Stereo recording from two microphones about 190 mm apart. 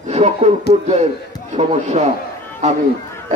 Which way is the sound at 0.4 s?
35° right (ahead or behind).